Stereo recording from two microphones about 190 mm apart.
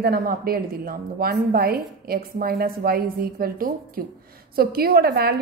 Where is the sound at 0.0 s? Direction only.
55° right (ahead or behind).